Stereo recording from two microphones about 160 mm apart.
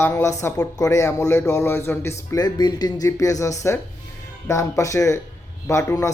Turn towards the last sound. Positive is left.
turn(degrees=20)  # may be behind; listen again after turning